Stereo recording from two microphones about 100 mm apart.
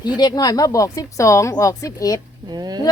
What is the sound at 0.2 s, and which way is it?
Speech, 40° left (ahead or behind).